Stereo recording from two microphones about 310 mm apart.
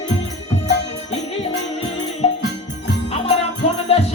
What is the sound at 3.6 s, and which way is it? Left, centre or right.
Music, left.